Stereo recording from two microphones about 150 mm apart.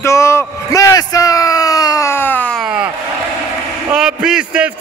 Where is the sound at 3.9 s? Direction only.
5° right (ahead or behind).